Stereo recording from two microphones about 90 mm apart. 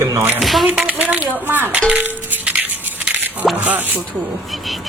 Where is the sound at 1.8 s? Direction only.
15° right (ahead or behind).